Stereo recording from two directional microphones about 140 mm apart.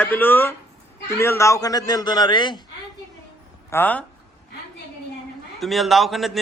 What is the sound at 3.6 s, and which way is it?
Speech, 15° left (ahead or behind).